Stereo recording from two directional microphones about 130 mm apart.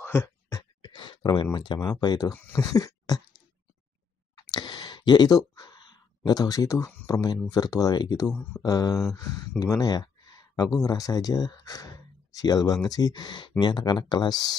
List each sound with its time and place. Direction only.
0.0 s a sound: 20° left (ahead or behind)
0.9 s speech: 35° left (ahead or behind)
2.3 s speech: 15° left (ahead or behind)
2.6 s a sound: 30° left (ahead or behind)
4.4 s clicking: 30° left (ahead or behind)
5.6 s speech: 35° left (ahead or behind)